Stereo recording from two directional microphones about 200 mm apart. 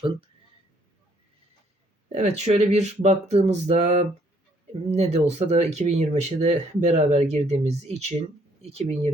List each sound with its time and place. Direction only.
2.1 s speech: 35° right (ahead or behind)